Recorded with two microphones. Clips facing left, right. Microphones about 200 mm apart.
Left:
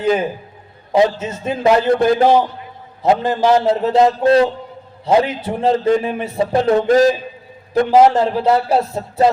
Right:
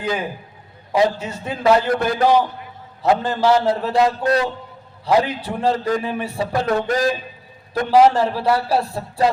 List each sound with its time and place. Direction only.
0.0 s a man's voice: 25° left (ahead or behind)